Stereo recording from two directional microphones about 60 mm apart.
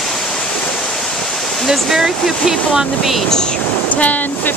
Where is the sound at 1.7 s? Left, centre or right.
Centre.